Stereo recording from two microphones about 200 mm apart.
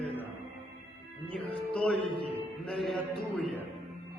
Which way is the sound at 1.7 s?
5° left (ahead or behind).